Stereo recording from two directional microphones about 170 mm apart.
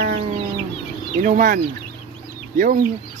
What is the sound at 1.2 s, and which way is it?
Speech, 50° right (ahead or behind).